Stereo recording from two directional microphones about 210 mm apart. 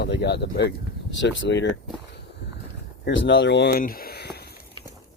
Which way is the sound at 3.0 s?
60° left (ahead or behind).